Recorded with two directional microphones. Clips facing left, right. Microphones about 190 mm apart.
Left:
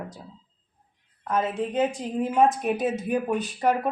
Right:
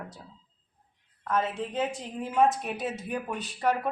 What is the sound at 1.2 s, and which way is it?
Speech, 15° left (ahead or behind).